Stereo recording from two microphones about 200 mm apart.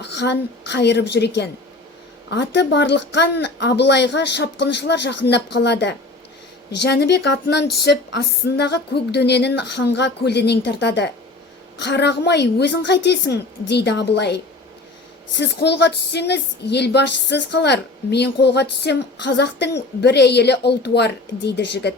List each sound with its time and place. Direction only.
0.0 s speech: 60° left (ahead or behind)